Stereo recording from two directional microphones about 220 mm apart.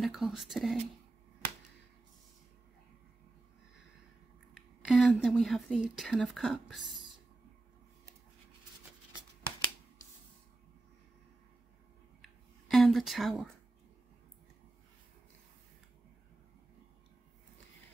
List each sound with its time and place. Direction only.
0.0 s speech: centre (ahead or behind)
4.6 s speech: centre (ahead or behind)
12.2 s a sound: centre (ahead or behind)